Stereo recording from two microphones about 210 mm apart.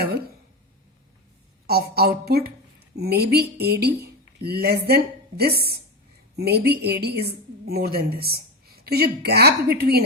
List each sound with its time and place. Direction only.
1.6 s a woman's voice: 45° right (ahead or behind)